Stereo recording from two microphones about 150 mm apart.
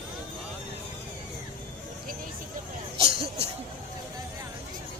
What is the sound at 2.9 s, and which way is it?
Music, 40° right (ahead or behind).